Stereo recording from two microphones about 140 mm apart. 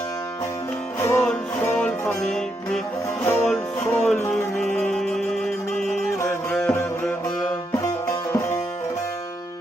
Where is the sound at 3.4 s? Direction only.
Centre (ahead or behind).